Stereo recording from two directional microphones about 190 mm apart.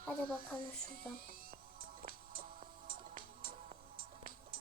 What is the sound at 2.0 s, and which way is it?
Music, 50° right (ahead or behind).